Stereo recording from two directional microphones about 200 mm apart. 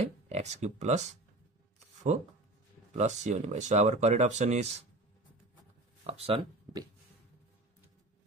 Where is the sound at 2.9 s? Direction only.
35° right (ahead or behind).